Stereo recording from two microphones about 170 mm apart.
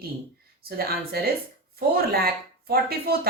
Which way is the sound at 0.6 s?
65° right (ahead or behind).